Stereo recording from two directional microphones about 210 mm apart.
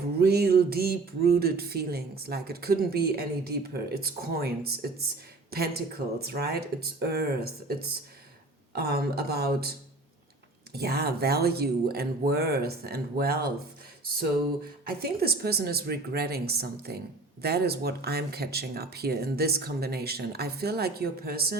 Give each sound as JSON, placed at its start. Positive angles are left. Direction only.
{"t": 0.2, "sound": "speech", "side_deg": -50}